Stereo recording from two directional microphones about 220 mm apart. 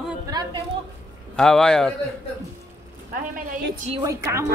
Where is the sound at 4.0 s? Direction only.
15° right (ahead or behind).